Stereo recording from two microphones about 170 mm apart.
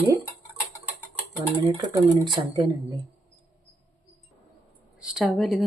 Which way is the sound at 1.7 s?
25° right (ahead or behind).